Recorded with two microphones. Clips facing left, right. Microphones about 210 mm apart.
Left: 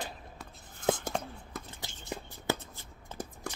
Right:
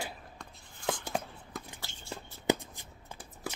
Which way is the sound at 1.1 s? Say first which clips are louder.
Even; 5° right (ahead or behind).